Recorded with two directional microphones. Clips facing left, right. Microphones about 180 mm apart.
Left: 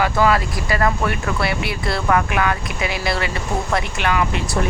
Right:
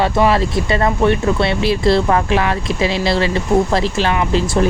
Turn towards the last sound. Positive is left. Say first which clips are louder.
# right 5 dB
turn(degrees=-30)  # may be behind; listen again after turning